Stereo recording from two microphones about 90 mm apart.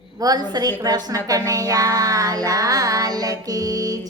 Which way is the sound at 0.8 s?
45° right (ahead or behind).